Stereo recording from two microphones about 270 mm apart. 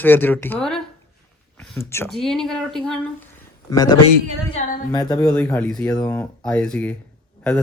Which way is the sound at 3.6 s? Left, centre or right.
Centre.